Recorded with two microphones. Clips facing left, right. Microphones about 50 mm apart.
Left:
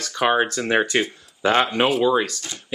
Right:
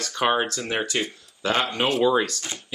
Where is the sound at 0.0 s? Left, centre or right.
Centre.